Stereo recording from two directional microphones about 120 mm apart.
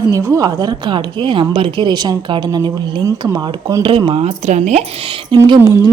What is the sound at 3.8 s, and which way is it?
Speech, 50° right (ahead or behind).